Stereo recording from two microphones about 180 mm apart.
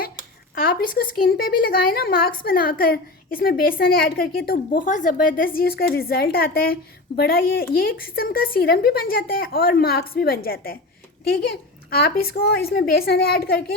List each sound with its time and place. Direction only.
0.5 s a woman's voice: 55° left (ahead or behind)